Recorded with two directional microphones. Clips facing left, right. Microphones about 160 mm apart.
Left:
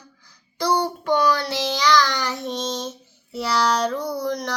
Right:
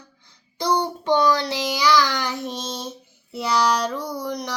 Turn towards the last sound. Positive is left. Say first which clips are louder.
# left 3 dB
turn(degrees=-10)  # may be behind; listen again after turning